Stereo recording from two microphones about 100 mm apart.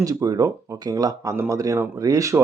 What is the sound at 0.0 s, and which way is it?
Speech, 35° right (ahead or behind).